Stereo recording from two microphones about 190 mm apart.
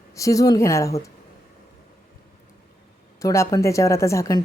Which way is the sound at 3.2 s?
15° left (ahead or behind).